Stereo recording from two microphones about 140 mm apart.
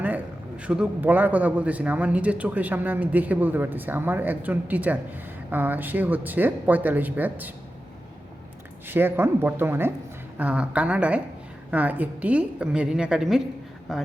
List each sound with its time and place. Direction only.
0.0 s a man's voice: 10° right (ahead or behind)
8.9 s a man's voice: 15° right (ahead or behind)